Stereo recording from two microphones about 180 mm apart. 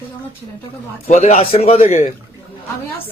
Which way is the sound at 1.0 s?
40° left (ahead or behind).